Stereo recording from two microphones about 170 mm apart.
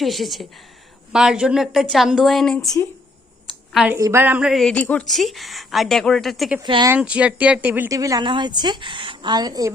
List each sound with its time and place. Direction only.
0.0 s a woman's voice: centre (ahead or behind)
3.9 s a woman's voice: 15° right (ahead or behind); by 6.6 s centre (ahead or behind)
6.6 s a woman's voice: 25° right (ahead or behind)
6.9 s a woman's voice: 5° right (ahead or behind)